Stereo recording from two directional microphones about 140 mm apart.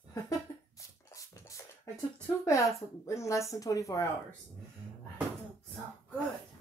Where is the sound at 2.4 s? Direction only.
20° left (ahead or behind).